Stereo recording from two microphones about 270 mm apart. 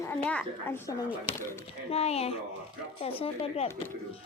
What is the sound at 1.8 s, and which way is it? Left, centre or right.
Speech, left.